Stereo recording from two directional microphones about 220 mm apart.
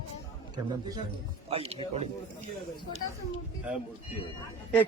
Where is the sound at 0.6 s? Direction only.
20° right (ahead or behind).